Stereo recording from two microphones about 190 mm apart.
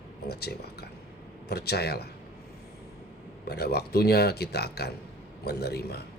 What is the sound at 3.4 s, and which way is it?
Speech, 55° left (ahead or behind).